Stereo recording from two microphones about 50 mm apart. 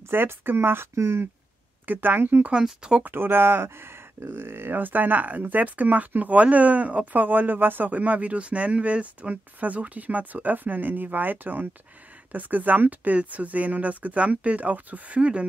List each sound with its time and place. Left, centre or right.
0.1 s speech: right
0.9 s speech: right
1.9 s speech: right
2.5 s speech: centre
3.0 s speech: right